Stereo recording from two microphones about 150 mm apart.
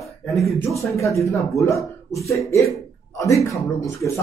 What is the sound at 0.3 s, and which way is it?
Speech, centre (ahead or behind).